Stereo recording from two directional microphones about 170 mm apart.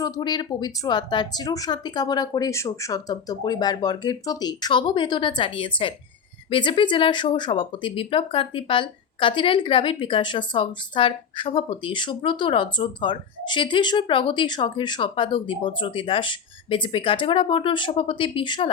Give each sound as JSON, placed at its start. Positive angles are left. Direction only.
{"t": 0.0, "sound": "speech", "side_deg": 25}